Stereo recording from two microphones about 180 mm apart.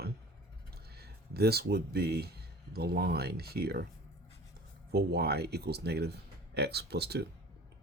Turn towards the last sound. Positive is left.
turn(degrees=-65)  # may be behind; listen again after turning